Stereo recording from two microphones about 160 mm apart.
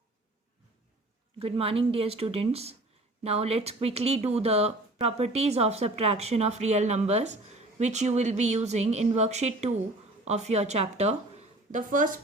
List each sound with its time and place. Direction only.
1.4 s a woman's voice: 35° right (ahead or behind); by 12.1 s 55° right (ahead or behind)